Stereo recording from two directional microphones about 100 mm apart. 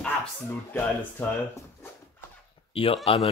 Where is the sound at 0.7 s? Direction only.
20° left (ahead or behind).